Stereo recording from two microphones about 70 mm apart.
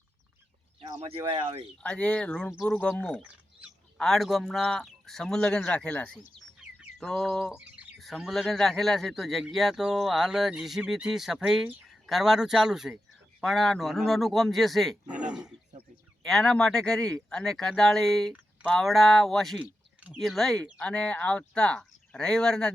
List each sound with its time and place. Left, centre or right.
1.8 s speech: centre
3.9 s speech: centre
7.0 s speech: centre
7.5 s bird: centre
8.2 s speech: centre
15.0 s roaring cats: centre
16.3 s speech: centre
19.5 s a sound: centre
20.1 s speech: centre